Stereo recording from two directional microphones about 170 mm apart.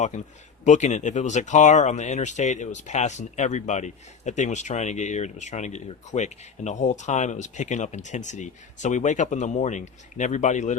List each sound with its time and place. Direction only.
0.1 s speech: 45° left (ahead or behind)